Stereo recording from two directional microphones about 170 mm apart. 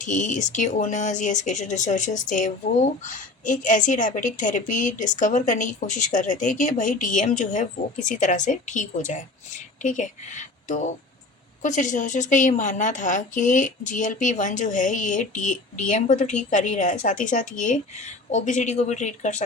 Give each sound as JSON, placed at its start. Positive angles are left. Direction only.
{"t": 0.0, "sound": "speech", "side_deg": 45}